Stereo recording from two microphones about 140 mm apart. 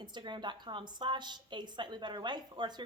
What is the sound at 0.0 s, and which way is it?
A woman's voice, 35° right (ahead or behind).